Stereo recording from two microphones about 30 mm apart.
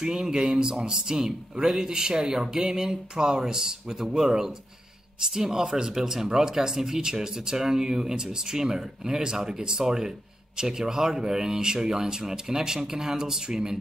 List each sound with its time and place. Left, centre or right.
0.0 s speech: right